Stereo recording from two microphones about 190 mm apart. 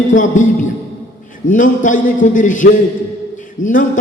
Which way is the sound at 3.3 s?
45° left (ahead or behind).